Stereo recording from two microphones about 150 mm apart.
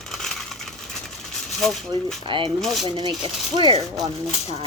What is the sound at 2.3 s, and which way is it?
Speech, 35° right (ahead or behind).